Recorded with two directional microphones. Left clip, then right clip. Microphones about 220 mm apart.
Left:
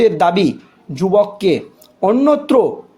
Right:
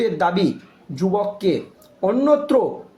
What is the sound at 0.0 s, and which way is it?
Speech, 45° left (ahead or behind).